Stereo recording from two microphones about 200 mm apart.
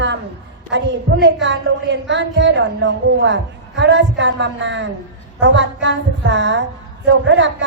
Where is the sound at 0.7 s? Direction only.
60° right (ahead or behind).